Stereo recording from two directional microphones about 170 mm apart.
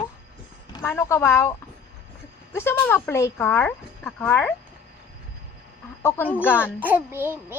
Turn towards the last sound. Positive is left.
turn(degrees=-15)  # may be behind; listen again after turning